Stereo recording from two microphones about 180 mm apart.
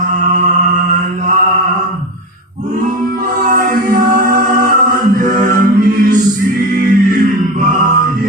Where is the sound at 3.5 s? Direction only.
50° right (ahead or behind).